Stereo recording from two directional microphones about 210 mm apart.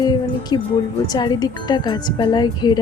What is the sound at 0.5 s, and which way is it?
Speech, 20° left (ahead or behind).